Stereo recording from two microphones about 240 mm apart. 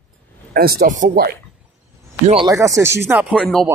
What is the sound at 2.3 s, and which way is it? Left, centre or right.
Speech, centre.